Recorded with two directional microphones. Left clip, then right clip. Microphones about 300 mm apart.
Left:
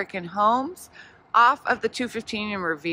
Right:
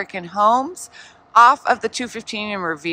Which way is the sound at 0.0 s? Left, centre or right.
Centre.